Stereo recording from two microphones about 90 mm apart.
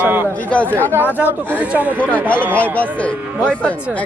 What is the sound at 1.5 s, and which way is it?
Speech, 15° right (ahead or behind).